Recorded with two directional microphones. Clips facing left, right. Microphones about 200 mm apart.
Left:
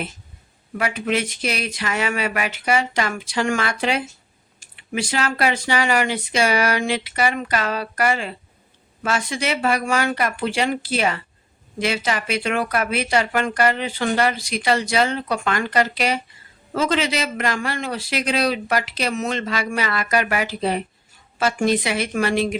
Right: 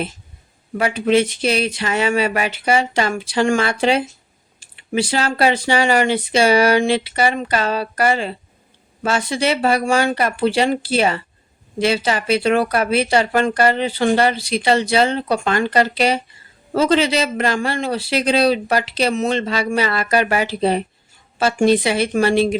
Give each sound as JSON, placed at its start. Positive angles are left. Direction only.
{"t": 0.8, "sound": "speech", "side_deg": -30}